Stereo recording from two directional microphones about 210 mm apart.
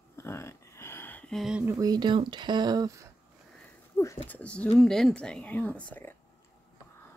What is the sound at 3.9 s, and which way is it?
Speech, 15° left (ahead or behind).